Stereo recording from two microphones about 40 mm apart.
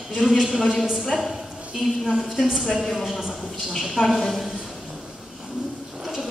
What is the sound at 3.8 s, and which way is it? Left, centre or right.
Speech, centre.